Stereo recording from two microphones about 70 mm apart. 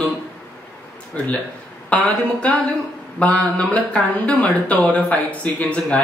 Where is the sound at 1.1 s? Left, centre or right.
Centre.